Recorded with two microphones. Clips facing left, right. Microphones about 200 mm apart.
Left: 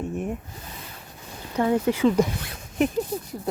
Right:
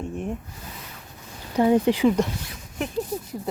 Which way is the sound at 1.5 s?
15° right (ahead or behind).